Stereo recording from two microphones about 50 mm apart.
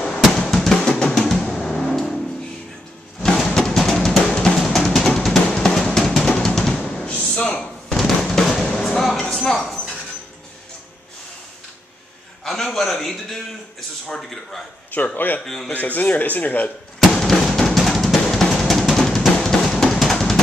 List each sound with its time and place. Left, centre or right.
0.6 s drum: centre
3.3 s drum: centre
7.2 s a sound: left
7.9 s drum: centre
8.6 s music: centre
9.2 s a sound: centre
12.4 s a man's voice: centre
15.1 s speech: left
15.4 s a man's voice: centre
15.7 s speech: left
17.0 s drum: centre
20.0 s music: centre